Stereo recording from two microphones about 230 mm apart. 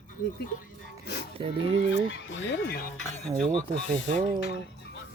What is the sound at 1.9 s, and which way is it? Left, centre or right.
Speech, left.